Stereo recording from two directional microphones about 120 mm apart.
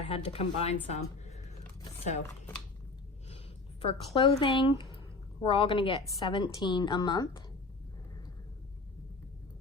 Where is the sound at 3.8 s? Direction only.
45° left (ahead or behind).